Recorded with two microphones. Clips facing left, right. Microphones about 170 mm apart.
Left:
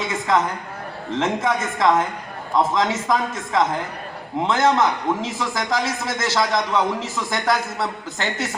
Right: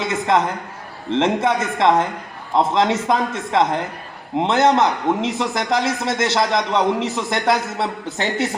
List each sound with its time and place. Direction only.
0.0 s a man's voice: 25° right (ahead or behind)